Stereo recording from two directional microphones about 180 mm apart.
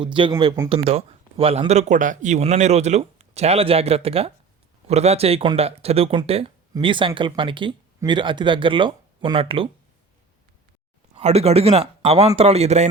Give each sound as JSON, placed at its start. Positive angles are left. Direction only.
{"t": 0.0, "sound": "speech", "side_deg": -25}
{"t": 11.1, "sound": "speech", "side_deg": -35}